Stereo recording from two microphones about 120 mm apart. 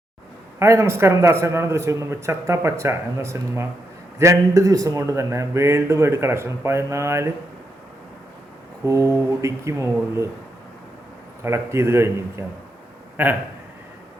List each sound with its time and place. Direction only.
0.6 s a man's voice: 20° right (ahead or behind)
8.9 s a man's voice: 25° right (ahead or behind)
11.4 s a man's voice: 20° right (ahead or behind)